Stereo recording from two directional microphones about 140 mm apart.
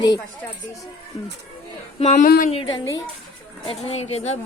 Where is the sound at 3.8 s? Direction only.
50° left (ahead or behind).